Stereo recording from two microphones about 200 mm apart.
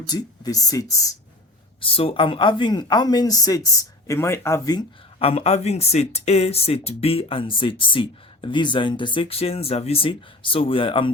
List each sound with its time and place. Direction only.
0.0 s speech: 20° left (ahead or behind)